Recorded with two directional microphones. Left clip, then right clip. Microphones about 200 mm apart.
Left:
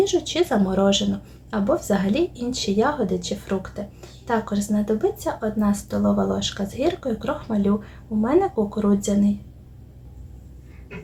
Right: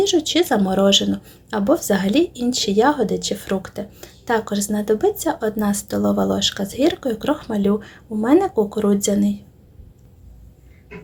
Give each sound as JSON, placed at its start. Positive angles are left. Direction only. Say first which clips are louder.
{"t": 0.0, "sound": "a woman's voice", "louder": "right 3 dB", "side_deg": -35}